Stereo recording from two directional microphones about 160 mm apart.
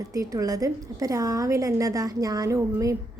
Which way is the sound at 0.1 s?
20° right (ahead or behind).